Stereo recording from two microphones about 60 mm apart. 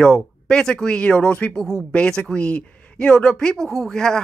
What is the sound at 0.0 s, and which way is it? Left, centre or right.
Speech, centre.